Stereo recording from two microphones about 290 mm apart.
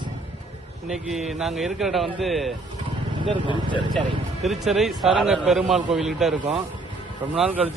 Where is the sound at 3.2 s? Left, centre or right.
Centre.